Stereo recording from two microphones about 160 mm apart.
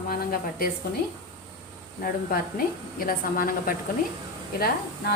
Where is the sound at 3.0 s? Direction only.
60° left (ahead or behind).